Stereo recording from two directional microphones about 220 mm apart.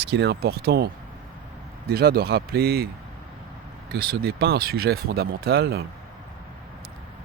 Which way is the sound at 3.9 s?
45° right (ahead or behind).